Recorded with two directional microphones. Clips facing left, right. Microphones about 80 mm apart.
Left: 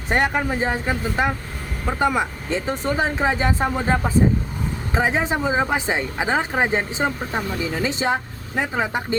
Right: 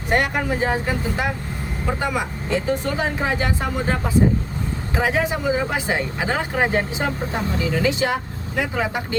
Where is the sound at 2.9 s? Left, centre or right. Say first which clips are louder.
Left 2 dB; left.